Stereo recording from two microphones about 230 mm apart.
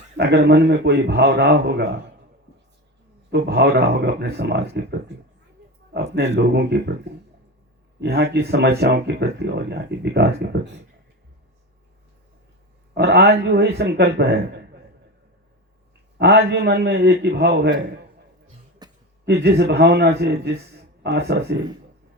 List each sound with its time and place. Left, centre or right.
0.2 s speech: right
3.3 s speech: right
8.0 s speech: right
12.9 s speech: right
16.1 s speech: right
18.8 s a sound: centre
19.2 s speech: right